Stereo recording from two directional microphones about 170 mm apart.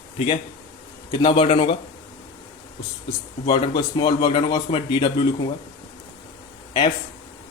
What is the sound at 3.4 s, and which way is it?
A man's voice, 25° left (ahead or behind).